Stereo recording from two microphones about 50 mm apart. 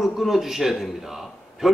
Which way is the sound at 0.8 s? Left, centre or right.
Centre.